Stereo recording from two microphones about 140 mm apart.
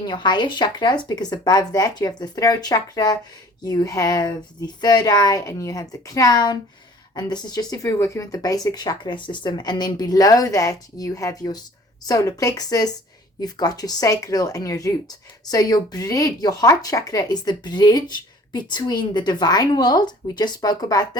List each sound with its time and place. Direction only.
0.0 s speech: 30° left (ahead or behind)